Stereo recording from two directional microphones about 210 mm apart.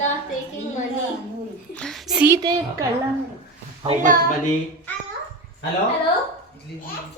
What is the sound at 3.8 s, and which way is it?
Speech, 35° right (ahead or behind).